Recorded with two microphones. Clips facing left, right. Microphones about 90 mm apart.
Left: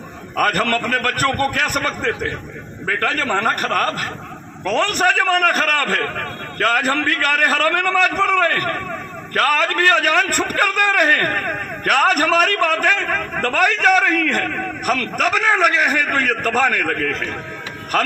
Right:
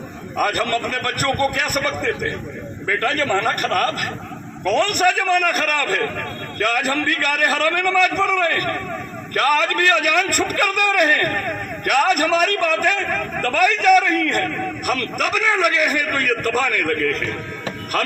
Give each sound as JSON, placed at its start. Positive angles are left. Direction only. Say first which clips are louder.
{"t": 0.3, "sound": "a man's voice", "louder": "left 2 dB", "side_deg": 45}
{"t": 6.7, "sound": "a man's voice", "louder": "left 2 dB", "side_deg": 40}
{"t": 16.9, "sound": "a man's voice", "louder": "right 1 dB", "side_deg": 55}